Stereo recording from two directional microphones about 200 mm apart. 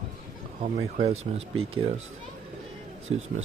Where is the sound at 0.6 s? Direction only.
30° right (ahead or behind).